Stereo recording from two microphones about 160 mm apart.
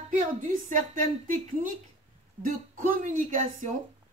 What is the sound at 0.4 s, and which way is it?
Speech, 55° right (ahead or behind).